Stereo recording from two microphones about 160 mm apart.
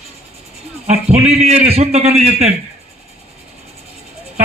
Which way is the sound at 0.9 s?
40° right (ahead or behind).